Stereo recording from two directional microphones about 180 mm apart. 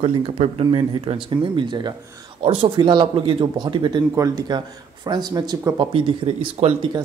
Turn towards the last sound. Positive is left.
turn(degrees=-35)  # may be behind; listen again after turning